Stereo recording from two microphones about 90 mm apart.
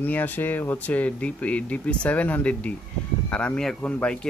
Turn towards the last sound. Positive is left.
turn(degrees=15)  # may be behind; listen again after turning